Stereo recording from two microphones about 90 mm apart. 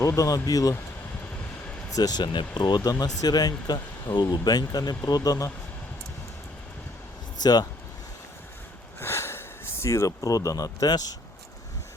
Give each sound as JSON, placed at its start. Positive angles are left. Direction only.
{"t": 0.0, "sound": "speech", "side_deg": 35}
{"t": 1.9, "sound": "speech", "side_deg": 45}
{"t": 7.4, "sound": "speech", "side_deg": 50}
{"t": 9.0, "sound": "speech", "side_deg": 30}